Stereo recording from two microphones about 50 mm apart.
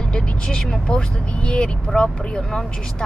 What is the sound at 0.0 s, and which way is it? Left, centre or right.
Speech, centre.